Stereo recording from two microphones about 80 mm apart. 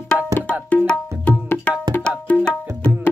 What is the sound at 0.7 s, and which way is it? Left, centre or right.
Tabla, centre.